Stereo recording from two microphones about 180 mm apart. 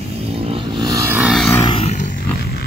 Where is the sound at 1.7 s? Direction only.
40° left (ahead or behind); by 2.7 s 60° left (ahead or behind).